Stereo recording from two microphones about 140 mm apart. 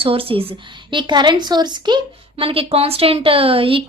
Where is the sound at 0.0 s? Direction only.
40° right (ahead or behind).